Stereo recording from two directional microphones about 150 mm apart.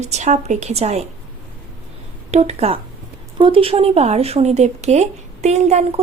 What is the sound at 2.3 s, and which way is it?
A woman's voice, 45° right (ahead or behind).